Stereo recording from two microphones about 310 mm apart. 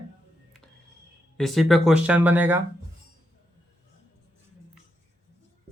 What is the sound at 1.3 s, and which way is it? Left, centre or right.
Speech, centre.